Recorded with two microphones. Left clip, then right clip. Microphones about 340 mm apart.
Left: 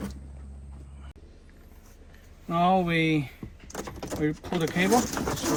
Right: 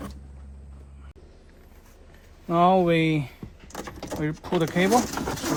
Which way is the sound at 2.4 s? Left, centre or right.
Centre.